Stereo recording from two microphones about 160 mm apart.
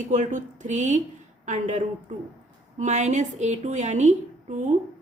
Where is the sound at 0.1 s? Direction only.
50° right (ahead or behind).